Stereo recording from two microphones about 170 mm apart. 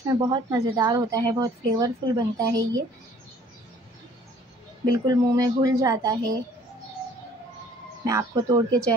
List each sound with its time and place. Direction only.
0.2 s speech: 20° right (ahead or behind)
5.0 s speech: 20° right (ahead or behind)
8.0 s speech: 20° right (ahead or behind)